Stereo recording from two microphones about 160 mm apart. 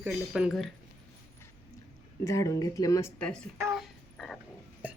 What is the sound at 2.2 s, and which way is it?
Speech, 20° left (ahead or behind).